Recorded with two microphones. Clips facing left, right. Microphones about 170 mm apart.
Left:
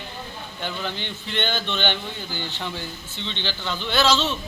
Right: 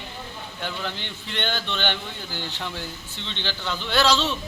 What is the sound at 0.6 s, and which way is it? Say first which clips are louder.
Speech: left 2 dB; centre (ahead or behind).